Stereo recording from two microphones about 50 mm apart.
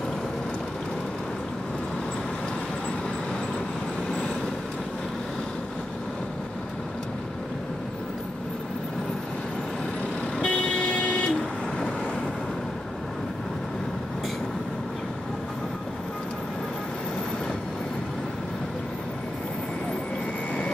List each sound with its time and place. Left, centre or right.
10.4 s vehicle: left